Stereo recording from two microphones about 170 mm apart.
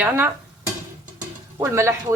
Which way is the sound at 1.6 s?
15° right (ahead or behind).